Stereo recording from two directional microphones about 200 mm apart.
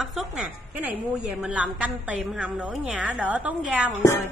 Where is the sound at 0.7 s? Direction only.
5° right (ahead or behind).